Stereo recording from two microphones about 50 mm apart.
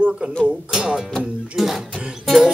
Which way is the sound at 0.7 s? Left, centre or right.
Centre.